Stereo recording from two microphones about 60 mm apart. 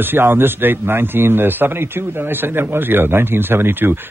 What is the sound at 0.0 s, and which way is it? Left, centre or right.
Speech, right.